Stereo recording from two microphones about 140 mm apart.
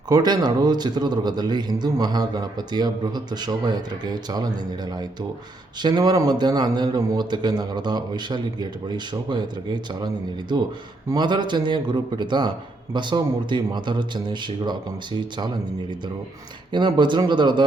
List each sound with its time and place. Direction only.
0.1 s a man's voice: 30° right (ahead or behind)
5.8 s a man's voice: 30° right (ahead or behind)
11.1 s a man's voice: 30° right (ahead or behind)
16.7 s a man's voice: 35° right (ahead or behind)